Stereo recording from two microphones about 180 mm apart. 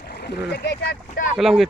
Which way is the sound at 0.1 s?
65° left (ahead or behind).